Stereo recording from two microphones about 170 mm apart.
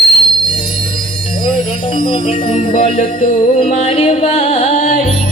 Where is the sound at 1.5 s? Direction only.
30° left (ahead or behind).